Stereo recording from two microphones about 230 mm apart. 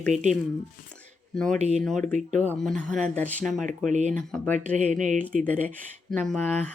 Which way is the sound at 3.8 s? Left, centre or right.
Right.